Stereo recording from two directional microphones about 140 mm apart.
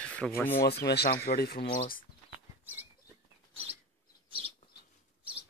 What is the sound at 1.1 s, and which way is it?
Speech, 90° left.